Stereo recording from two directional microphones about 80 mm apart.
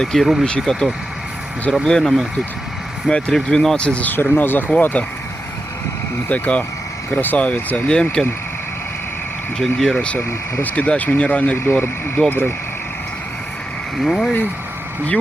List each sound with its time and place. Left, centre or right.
0.0 s speech: centre; by 5.0 s left
6.2 s speech: centre
9.6 s speech: centre
11.5 s speech: left
14.0 s speech: centre